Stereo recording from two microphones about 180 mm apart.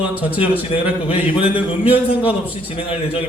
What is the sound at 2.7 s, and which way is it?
Speech, 30° left (ahead or behind).